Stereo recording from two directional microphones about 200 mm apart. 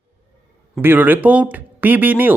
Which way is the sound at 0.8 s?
10° right (ahead or behind).